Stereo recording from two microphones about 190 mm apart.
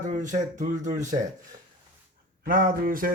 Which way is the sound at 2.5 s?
45° right (ahead or behind).